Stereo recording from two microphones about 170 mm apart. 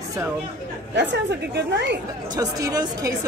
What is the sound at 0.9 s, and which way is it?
A woman's voice, 90° right.